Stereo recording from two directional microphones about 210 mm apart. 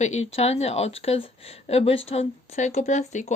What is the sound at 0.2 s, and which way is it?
Speech, 30° left (ahead or behind).